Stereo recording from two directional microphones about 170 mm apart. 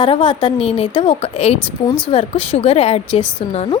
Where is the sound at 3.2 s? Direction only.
10° left (ahead or behind).